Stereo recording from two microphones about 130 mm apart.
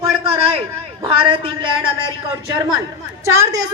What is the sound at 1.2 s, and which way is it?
Speech, 45° right (ahead or behind).